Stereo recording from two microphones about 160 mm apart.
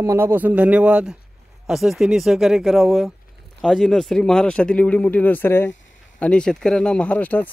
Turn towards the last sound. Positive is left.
turn(degrees=10)  # may be behind; listen again after turning